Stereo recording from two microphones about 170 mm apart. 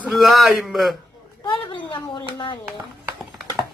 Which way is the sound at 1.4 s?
30° left (ahead or behind).